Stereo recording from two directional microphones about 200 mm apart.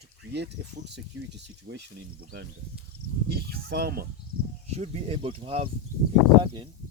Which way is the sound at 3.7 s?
50° right (ahead or behind).